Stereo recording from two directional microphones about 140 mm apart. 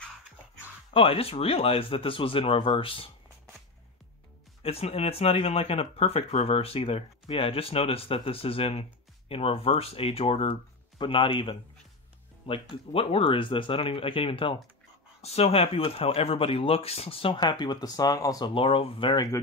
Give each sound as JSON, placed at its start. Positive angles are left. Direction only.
{"t": 0.9, "sound": "speech", "side_deg": 45}
{"t": 4.6, "sound": "speech", "side_deg": 45}
{"t": 18.5, "sound": "speech", "side_deg": 40}